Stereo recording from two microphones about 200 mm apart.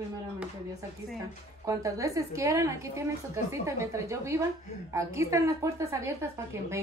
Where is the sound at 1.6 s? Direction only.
15° right (ahead or behind).